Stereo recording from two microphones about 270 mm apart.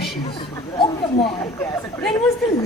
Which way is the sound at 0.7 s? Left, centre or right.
Centre.